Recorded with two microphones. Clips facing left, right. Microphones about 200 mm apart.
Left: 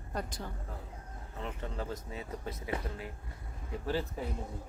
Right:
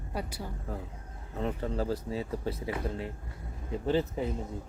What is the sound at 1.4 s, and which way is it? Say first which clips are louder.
Speech: right 8 dB; 35° right (ahead or behind).